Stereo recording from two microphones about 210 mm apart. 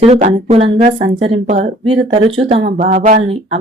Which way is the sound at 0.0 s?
30° right (ahead or behind).